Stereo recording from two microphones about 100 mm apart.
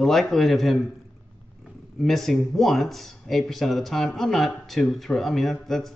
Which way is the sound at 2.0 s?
Centre (ahead or behind).